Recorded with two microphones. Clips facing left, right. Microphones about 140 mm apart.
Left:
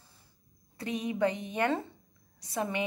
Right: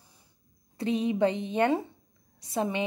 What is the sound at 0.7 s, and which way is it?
A woman's voice, 25° right (ahead or behind).